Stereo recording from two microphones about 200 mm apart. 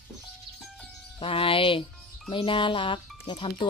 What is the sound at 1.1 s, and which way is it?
Music, 25° left (ahead or behind).